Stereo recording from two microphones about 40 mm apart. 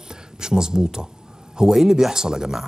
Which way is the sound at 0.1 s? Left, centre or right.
Centre.